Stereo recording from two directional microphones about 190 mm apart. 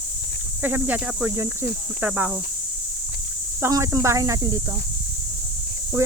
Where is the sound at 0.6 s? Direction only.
10° right (ahead or behind).